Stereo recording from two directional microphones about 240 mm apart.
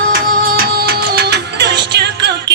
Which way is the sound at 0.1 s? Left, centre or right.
Right.